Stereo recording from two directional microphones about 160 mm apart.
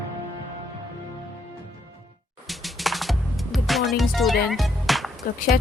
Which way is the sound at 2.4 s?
Centre (ahead or behind).